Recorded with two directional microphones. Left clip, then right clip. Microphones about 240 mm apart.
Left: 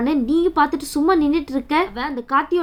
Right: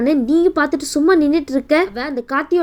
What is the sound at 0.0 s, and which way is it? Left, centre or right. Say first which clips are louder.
A woman's voice: right 4 dB; centre.